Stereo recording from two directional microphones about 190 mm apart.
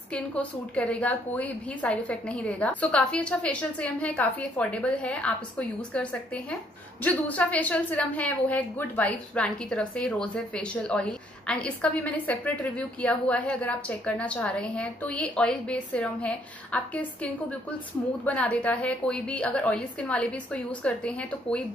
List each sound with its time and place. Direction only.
0.1 s a woman's voice: 5° left (ahead or behind)